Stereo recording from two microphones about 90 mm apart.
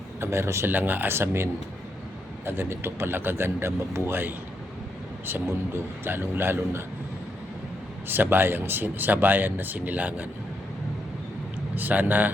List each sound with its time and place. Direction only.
0.2 s speech: 30° right (ahead or behind)
2.5 s speech: 25° right (ahead or behind)
8.0 s speech: 25° right (ahead or behind)
11.7 s speech: 20° right (ahead or behind)